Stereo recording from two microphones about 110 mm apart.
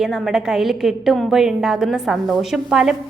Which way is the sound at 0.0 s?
5° right (ahead or behind).